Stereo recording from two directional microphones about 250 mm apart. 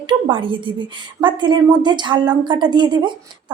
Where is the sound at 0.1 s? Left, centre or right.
Centre.